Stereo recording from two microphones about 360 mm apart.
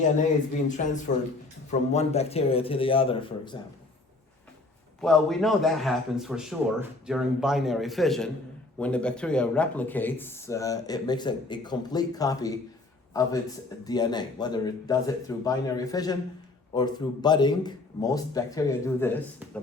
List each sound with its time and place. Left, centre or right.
0.0 s speech: left
4.9 s a man's voice: centre
13.8 s speech: centre